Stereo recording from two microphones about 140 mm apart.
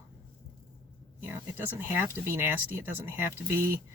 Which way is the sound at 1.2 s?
15° right (ahead or behind).